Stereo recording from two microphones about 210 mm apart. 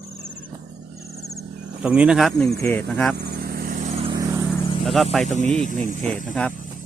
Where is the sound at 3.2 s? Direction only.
50° right (ahead or behind).